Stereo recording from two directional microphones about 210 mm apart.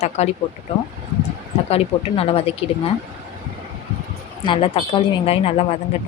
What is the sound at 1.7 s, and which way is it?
Speech, 30° left (ahead or behind).